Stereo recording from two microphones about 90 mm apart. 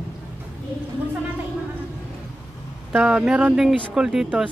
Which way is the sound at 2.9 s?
10° right (ahead or behind).